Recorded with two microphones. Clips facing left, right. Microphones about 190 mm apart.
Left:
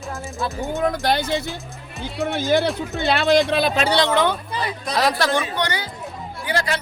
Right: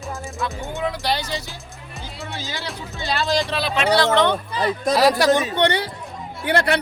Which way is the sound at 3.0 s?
60° left (ahead or behind).